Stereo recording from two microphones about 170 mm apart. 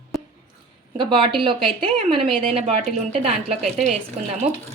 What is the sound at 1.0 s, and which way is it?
A woman's voice, 25° right (ahead or behind).